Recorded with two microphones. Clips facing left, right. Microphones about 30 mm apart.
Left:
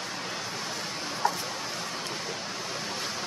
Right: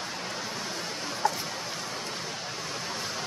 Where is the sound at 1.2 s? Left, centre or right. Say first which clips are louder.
Even; centre.